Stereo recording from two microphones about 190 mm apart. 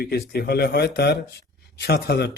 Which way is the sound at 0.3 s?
60° left (ahead or behind).